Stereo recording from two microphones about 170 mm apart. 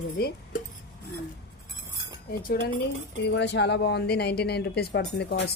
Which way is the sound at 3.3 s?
90° left.